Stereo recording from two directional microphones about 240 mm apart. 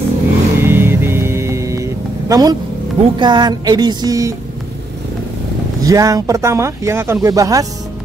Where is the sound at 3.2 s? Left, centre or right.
Centre.